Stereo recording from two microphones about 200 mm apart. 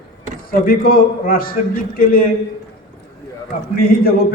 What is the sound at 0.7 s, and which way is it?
A man's voice, 45° left (ahead or behind).